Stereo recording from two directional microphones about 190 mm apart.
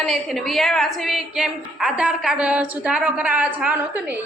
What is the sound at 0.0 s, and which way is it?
A woman's voice, centre (ahead or behind).